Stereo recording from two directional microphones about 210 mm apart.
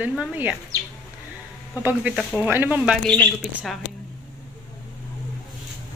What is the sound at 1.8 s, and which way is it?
Speech, 10° right (ahead or behind).